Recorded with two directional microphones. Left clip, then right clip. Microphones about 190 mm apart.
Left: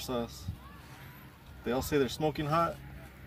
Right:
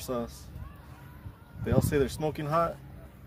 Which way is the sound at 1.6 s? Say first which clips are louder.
Right 2 dB; 15° right (ahead or behind).